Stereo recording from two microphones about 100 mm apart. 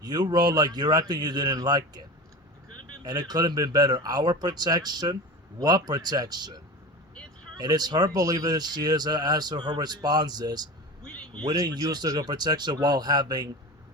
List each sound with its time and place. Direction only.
0.0 s a man's voice: 45° right (ahead or behind)
11.0 s a sound: 10° left (ahead or behind)
11.4 s a man's voice: 40° right (ahead or behind)